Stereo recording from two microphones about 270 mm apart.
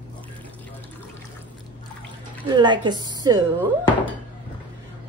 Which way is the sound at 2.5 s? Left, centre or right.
Centre.